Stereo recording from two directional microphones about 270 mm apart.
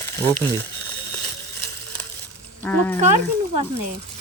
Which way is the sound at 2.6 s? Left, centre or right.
Centre.